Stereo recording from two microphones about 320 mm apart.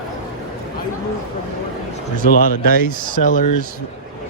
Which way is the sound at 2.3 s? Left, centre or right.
Left.